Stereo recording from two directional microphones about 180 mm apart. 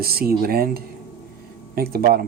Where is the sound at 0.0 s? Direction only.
55° right (ahead or behind).